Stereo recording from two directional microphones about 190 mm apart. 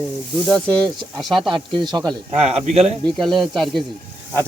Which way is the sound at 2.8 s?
Centre (ahead or behind).